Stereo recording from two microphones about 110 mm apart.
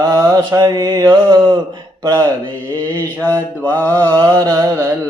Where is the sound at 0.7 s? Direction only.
40° right (ahead or behind).